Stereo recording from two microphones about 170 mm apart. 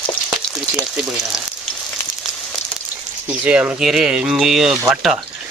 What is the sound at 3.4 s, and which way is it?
Speech, 10° right (ahead or behind).